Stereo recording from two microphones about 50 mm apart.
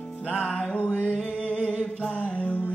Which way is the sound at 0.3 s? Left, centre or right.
Left.